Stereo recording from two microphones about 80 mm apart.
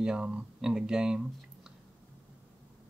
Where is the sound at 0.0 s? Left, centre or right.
Centre.